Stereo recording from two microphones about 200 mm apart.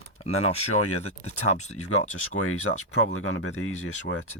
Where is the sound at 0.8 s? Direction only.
90° left.